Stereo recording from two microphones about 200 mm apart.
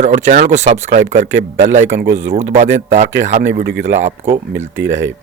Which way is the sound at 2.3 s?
35° right (ahead or behind).